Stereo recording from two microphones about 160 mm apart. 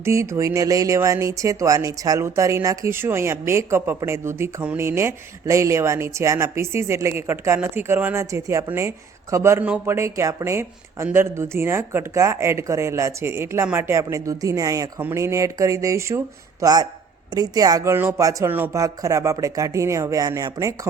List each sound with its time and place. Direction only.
0.0 s speech: 15° right (ahead or behind)